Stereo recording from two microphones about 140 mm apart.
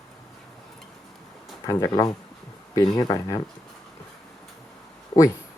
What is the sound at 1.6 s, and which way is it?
Speech, 25° left (ahead or behind).